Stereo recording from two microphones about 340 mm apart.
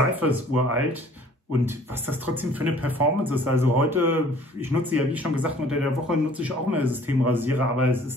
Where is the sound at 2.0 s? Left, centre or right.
Centre.